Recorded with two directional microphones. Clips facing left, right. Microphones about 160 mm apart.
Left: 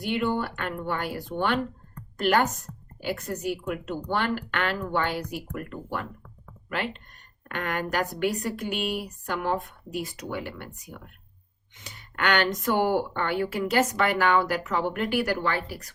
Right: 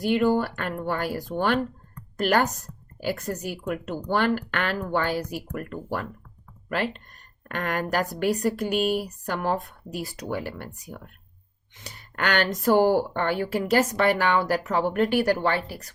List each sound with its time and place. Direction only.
0.0 s speech: 40° right (ahead or behind)
7.4 s speech: 35° right (ahead or behind)